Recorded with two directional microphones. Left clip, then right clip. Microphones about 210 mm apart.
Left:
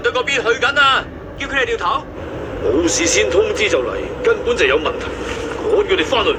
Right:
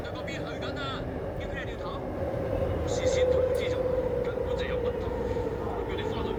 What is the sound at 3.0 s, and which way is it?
Speech, 55° left (ahead or behind).